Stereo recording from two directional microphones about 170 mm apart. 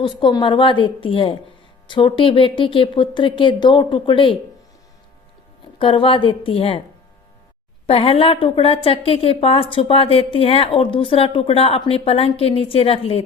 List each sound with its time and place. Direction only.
0.0 s speech: 25° left (ahead or behind)
5.8 s a woman's voice: 30° left (ahead or behind)
7.9 s a woman's voice: 35° left (ahead or behind)